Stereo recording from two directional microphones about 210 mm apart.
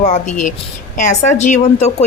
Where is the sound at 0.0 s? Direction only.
35° left (ahead or behind).